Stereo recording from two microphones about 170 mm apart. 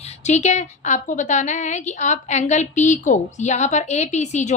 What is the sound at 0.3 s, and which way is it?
A woman's voice, 45° left (ahead or behind).